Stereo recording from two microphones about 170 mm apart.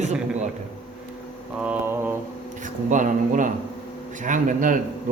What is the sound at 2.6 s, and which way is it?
A man's voice, 50° right (ahead or behind).